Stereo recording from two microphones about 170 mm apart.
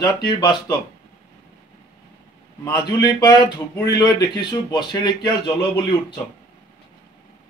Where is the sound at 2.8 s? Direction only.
20° left (ahead or behind).